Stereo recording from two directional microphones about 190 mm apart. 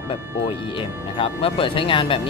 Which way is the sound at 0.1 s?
30° left (ahead or behind).